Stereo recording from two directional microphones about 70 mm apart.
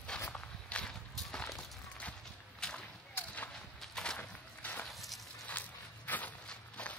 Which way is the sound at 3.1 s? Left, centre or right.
Left.